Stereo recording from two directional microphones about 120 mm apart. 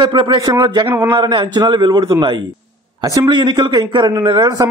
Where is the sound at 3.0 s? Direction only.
30° right (ahead or behind).